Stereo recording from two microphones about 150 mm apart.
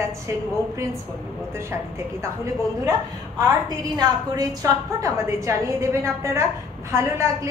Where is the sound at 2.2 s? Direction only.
20° right (ahead or behind).